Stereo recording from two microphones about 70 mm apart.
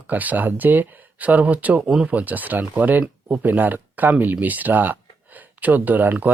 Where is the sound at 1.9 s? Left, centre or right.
Centre.